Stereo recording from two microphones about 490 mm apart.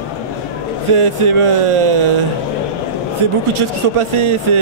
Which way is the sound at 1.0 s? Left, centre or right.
Right.